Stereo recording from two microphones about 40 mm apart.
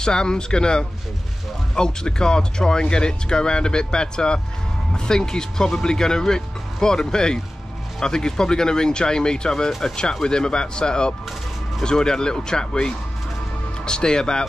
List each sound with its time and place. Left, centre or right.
0.0 s speech: centre
9.7 s speech: centre
10.2 s speech: centre